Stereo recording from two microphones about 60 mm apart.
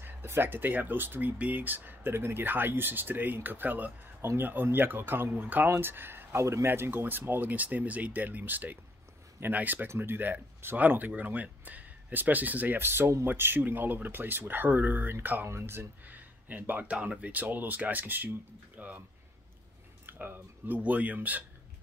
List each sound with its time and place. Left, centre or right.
0.0 s speech: right
6.4 s speech: right
6.7 s speech: right
9.8 s speech: right
16.1 s speech: right
20.1 s speech: right